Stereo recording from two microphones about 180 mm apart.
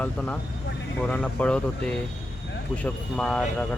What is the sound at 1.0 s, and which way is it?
Speech, 10° left (ahead or behind).